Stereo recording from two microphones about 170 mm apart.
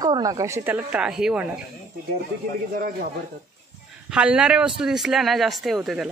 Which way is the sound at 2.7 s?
60° right (ahead or behind).